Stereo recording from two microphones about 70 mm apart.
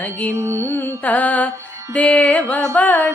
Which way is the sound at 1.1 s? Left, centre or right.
Left.